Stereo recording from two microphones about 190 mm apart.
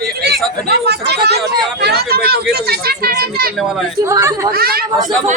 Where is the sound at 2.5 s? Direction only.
55° right (ahead or behind).